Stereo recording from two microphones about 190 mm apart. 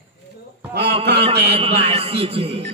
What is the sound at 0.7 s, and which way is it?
Speech, 65° right (ahead or behind).